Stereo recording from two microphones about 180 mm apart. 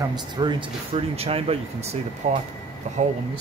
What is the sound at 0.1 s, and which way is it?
Speech, 25° right (ahead or behind).